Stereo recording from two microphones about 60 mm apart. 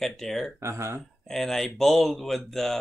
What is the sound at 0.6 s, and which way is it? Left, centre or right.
Speech, right.